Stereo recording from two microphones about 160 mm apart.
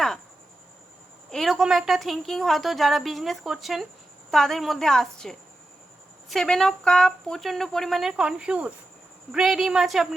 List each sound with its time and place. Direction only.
1.3 s a woman's voice: centre (ahead or behind)